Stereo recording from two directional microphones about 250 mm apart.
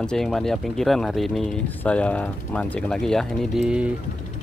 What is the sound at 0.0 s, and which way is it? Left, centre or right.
Speech, centre.